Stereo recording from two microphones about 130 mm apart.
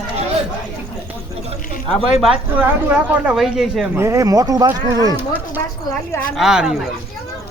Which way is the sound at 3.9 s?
20° right (ahead or behind).